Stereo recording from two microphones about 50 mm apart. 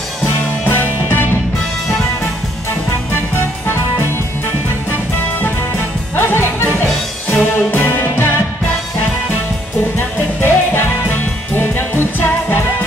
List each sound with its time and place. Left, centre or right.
0.2 s music: left
3.3 s music: left
6.1 s music: left
9.9 s music: left